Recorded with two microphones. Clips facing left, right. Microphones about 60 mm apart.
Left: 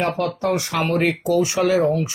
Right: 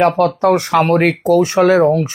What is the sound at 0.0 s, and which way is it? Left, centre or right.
Speech, right.